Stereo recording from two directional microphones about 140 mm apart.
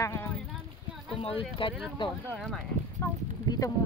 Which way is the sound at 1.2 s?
40° left (ahead or behind).